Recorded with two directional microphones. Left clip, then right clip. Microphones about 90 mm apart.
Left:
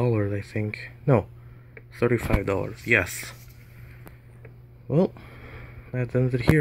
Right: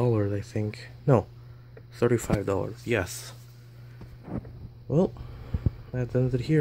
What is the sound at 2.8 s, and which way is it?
Speech, 30° right (ahead or behind).